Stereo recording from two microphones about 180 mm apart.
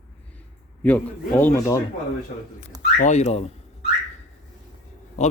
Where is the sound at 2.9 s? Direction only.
40° left (ahead or behind).